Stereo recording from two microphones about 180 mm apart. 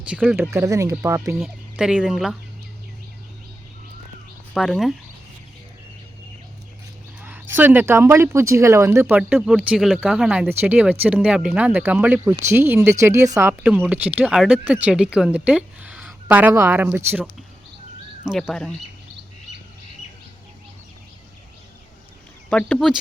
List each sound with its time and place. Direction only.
0.0 s speech: 5° right (ahead or behind)
1.4 s speech: 5° right (ahead or behind)
4.5 s speech: centre (ahead or behind)
7.2 s speech: 10° right (ahead or behind)
18.3 s speech: centre (ahead or behind)
22.4 s speech: 5° left (ahead or behind)